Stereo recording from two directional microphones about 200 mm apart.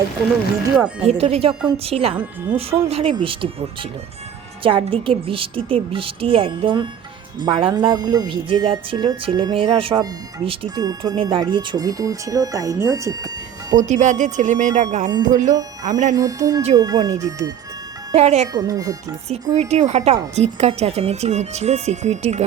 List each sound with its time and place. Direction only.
1.0 s speech: 30° right (ahead or behind)
13.8 s speech: 35° right (ahead or behind)
16.1 s speech: 15° right (ahead or behind)
18.1 s speech: 35° right (ahead or behind)
18.5 s speech: 20° right (ahead or behind)
19.5 s speech: 35° right (ahead or behind)